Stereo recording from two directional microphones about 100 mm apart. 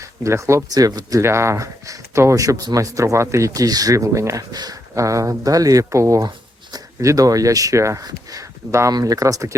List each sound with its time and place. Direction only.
0.0 s speech: 30° right (ahead or behind)
1.2 s speech: 25° right (ahead or behind)